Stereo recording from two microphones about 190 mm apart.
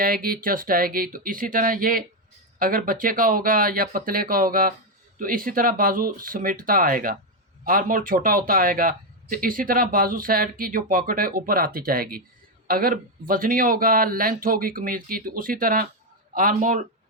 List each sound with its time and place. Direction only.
0.0 s a man's voice: 50° right (ahead or behind)